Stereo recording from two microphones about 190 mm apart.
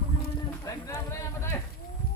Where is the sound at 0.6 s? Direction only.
15° left (ahead or behind).